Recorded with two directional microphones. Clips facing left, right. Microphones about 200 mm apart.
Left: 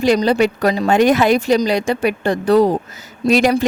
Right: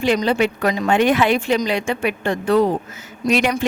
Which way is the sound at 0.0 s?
40° left (ahead or behind).